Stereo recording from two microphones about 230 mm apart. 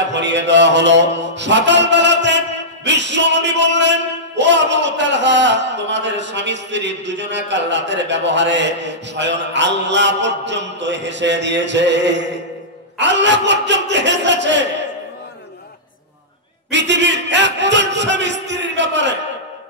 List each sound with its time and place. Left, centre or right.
0.1 s mantra: right
16.7 s mantra: right